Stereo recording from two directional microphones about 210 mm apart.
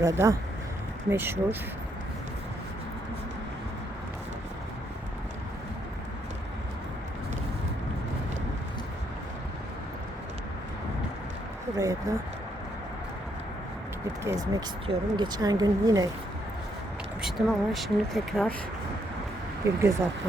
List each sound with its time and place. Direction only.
0.0 s speech: 15° right (ahead or behind)
11.7 s speech: 15° right (ahead or behind)
14.3 s speech: 20° right (ahead or behind)
17.2 s speech: centre (ahead or behind)
19.6 s speech: 15° right (ahead or behind)